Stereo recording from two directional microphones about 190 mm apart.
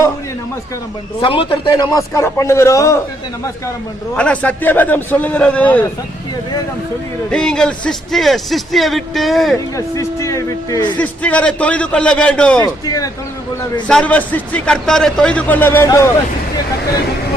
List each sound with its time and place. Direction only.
1.2 s a man's voice: 25° left (ahead or behind)
4.2 s a man's voice: 5° left (ahead or behind)
7.3 s speech: 5° left (ahead or behind)
9.7 s a man's voice: 15° left (ahead or behind)
10.9 s speech: 5° left (ahead or behind)
12.6 s speech: 20° left (ahead or behind)
13.8 s a man's voice: 5° left (ahead or behind)